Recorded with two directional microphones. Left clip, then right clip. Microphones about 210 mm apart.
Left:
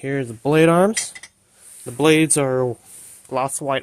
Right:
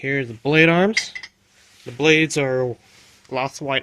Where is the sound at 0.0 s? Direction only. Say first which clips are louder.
Right 1 dB; 10° left (ahead or behind).